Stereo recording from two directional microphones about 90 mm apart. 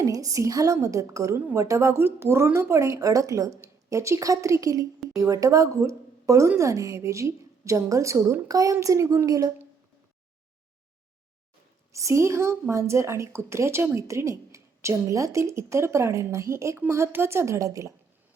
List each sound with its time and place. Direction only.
0.0 s speech: 40° right (ahead or behind)
11.9 s speech: 35° right (ahead or behind)